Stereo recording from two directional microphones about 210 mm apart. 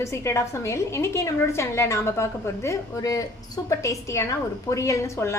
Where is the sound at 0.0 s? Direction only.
15° left (ahead or behind).